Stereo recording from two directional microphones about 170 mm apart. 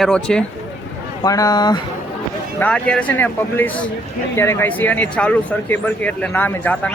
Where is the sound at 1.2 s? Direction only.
20° left (ahead or behind).